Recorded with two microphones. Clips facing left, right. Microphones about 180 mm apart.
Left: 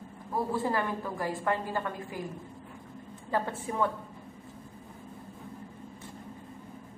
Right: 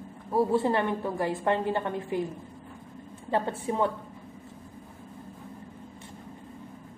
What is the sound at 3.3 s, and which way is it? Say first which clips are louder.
Speech: right 3 dB; 25° right (ahead or behind).